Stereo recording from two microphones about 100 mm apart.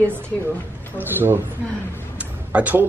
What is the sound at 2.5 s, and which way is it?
Speech, 15° right (ahead or behind).